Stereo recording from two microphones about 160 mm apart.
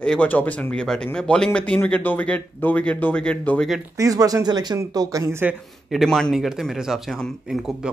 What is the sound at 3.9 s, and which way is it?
Speech, 20° right (ahead or behind).